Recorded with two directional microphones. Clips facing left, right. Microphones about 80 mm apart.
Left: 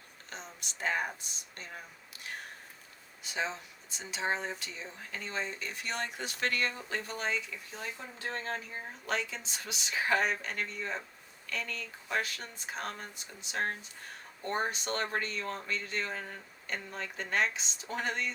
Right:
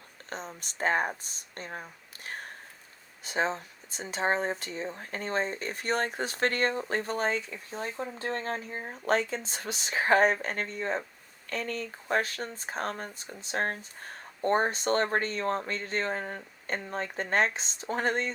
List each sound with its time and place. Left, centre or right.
0.3 s speech: right